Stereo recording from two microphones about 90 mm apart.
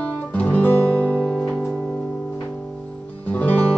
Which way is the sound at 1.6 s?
5° left (ahead or behind).